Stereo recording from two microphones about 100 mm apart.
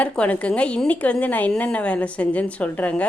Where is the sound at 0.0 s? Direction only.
15° left (ahead or behind).